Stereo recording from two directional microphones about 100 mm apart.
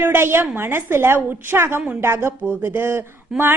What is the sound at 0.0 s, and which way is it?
A woman's voice, 20° right (ahead or behind).